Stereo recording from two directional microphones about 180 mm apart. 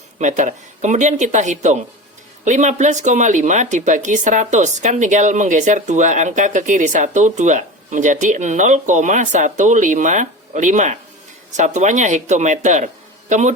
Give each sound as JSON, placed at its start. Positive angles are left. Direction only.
{"t": 0.2, "sound": "speech", "side_deg": -40}